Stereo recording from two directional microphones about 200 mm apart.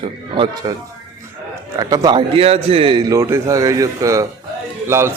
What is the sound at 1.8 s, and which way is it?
A man's voice, 20° right (ahead or behind).